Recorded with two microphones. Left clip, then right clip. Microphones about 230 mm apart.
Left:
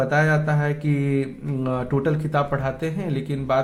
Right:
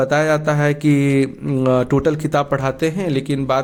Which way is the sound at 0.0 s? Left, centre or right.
Right.